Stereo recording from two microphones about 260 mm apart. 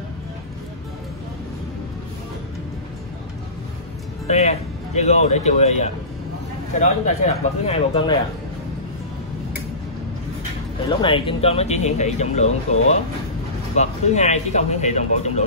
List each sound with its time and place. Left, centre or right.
4.3 s speech: left
10.9 s speech: centre